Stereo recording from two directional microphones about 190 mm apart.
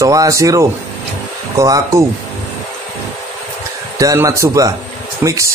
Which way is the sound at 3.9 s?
15° right (ahead or behind).